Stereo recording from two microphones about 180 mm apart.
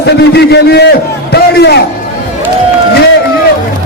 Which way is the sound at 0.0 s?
65° left (ahead or behind).